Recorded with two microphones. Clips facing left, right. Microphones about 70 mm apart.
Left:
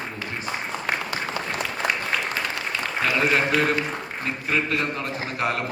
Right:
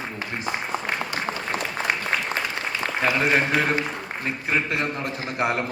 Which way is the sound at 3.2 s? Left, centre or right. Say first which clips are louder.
Left 2 dB; right.